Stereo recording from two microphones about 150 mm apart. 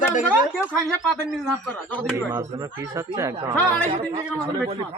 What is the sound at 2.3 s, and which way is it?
Speech, 20° right (ahead or behind).